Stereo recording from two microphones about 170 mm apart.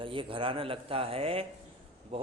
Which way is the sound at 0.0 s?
30° right (ahead or behind).